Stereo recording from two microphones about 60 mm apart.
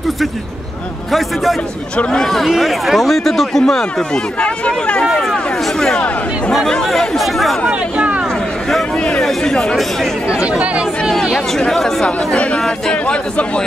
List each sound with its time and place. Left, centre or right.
1.1 s speech: centre
2.4 s speech: centre
5.1 s speech: centre
7.7 s speech: right
8.3 s a sound: centre
9.2 s speech: centre
10.4 s speech: right
11.2 s a man's voice: centre